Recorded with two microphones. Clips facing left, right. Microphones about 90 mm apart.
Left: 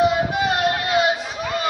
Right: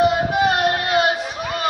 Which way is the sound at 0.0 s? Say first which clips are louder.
Right 2 dB; 55° right (ahead or behind).